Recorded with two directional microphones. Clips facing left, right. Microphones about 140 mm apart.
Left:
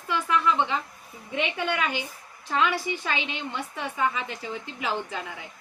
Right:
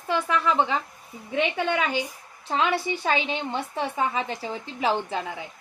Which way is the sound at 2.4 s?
30° right (ahead or behind).